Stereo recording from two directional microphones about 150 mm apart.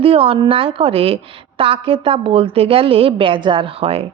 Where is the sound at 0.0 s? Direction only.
40° right (ahead or behind).